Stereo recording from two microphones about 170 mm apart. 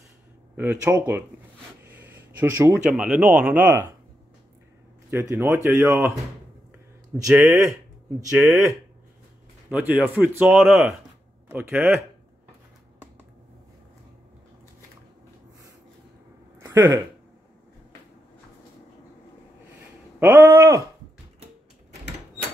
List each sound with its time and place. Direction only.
0.6 s speech: 10° right (ahead or behind)
1.9 s a sound: 10° right (ahead or behind)
2.8 s speech: 5° right (ahead or behind)
5.1 s speech: 15° right (ahead or behind)
7.2 s speech: 15° right (ahead or behind)
16.5 s a sound: 15° right (ahead or behind)
20.2 s speech: 10° right (ahead or behind)